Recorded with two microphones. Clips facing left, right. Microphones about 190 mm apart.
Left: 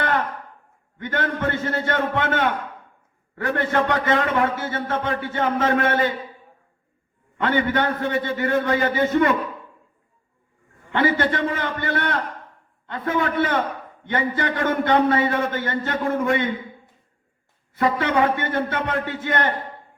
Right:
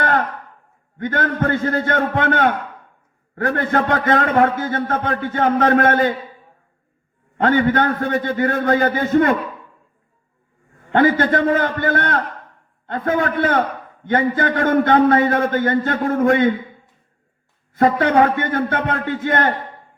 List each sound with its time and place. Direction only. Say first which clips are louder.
0.9 s a man's voice: right 5 dB; 45° right (ahead or behind)
7.4 s a man's voice: right 5 dB; 45° right (ahead or behind)
10.9 s a man's voice: right 5 dB; 45° right (ahead or behind)
17.7 s a man's voice: right 5 dB; 50° right (ahead or behind)